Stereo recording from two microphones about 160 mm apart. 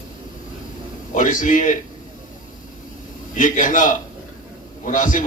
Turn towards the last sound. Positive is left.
turn(degrees=55)  # may be behind; listen again after turning